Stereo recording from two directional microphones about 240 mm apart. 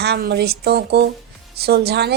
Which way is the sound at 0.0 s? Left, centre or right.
Right.